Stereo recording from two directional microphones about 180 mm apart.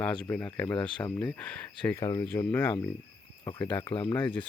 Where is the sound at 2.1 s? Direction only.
20° left (ahead or behind).